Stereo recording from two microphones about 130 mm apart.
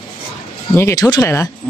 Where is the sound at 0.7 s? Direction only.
20° left (ahead or behind).